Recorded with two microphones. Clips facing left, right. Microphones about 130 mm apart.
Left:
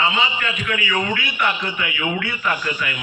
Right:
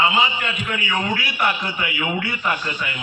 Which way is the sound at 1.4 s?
30° right (ahead or behind).